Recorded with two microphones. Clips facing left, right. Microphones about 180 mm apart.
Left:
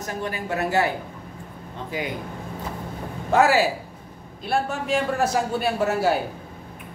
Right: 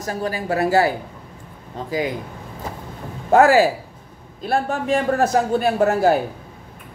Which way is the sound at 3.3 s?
50° right (ahead or behind).